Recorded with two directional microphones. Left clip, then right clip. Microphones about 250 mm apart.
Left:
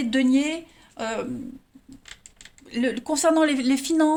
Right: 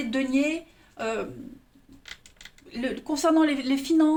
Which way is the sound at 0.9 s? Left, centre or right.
Left.